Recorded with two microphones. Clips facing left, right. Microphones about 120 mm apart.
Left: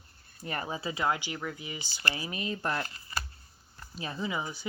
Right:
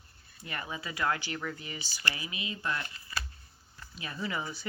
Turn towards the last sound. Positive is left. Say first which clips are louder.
# left 2 dB
turn(degrees=15)  # may be behind; listen again after turning